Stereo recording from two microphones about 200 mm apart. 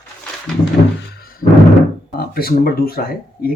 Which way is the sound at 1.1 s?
50° left (ahead or behind).